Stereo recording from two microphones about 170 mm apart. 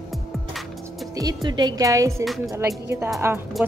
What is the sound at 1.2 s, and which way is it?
A woman's voice, 25° right (ahead or behind).